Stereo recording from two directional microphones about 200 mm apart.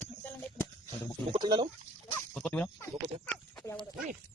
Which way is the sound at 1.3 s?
20° right (ahead or behind).